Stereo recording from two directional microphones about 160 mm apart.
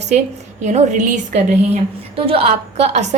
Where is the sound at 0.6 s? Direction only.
45° right (ahead or behind).